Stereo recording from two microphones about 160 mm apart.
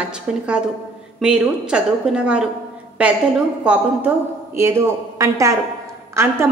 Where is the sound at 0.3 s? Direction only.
5° right (ahead or behind).